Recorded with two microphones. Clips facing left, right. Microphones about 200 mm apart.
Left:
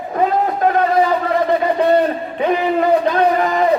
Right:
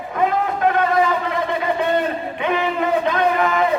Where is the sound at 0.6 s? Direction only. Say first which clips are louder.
Left 2 dB; 35° left (ahead or behind).